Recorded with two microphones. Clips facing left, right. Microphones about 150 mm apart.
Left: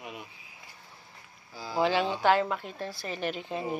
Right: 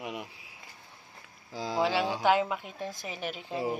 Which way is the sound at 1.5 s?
90° right.